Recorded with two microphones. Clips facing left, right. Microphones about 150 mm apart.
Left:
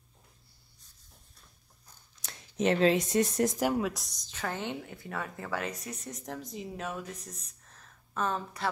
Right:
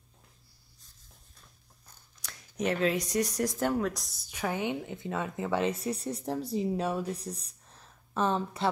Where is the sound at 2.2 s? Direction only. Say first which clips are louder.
Left 2 dB; 25° left (ahead or behind).